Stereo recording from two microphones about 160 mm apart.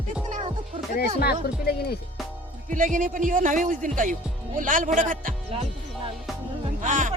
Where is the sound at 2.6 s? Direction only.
55° right (ahead or behind).